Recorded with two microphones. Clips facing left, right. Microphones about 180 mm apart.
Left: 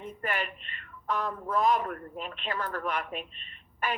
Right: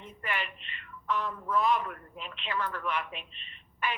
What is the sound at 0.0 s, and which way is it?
Speech, 45° left (ahead or behind).